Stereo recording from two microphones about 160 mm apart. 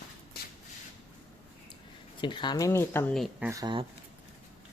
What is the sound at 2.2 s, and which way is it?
Speech, 30° left (ahead or behind).